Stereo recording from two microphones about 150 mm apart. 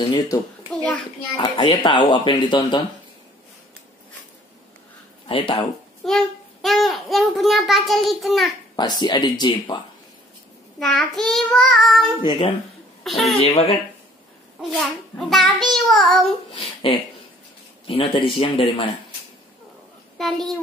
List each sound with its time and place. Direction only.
0.0 s speech: 25° left (ahead or behind)
5.3 s speech: 35° left (ahead or behind)
6.0 s a child's voice: centre (ahead or behind)
8.7 s speech: 30° left (ahead or behind)
10.8 s a child's voice: 5° left (ahead or behind)
12.2 s speech: 35° left (ahead or behind)
13.0 s a child's voice: centre (ahead or behind)
13.4 s speech: 40° left (ahead or behind)
15.1 s a child's voice: centre (ahead or behind)
17.8 s speech: 35° left (ahead or behind)
20.2 s a child's voice: centre (ahead or behind)